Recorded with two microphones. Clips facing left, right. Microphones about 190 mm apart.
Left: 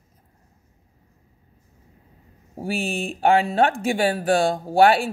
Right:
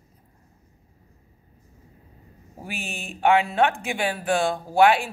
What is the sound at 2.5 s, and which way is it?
Speech, 30° left (ahead or behind).